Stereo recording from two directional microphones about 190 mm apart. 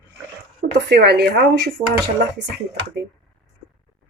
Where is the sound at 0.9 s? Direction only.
60° right (ahead or behind).